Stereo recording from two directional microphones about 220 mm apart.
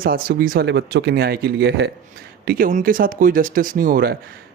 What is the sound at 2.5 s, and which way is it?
Speech, 35° right (ahead or behind).